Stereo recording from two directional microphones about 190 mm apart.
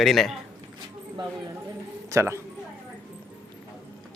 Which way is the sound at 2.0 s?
15° right (ahead or behind).